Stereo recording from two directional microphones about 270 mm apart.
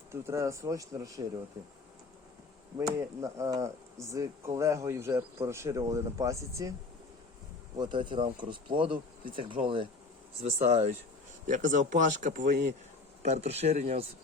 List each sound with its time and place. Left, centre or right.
0.1 s speech: centre
2.7 s speech: centre
7.8 s speech: centre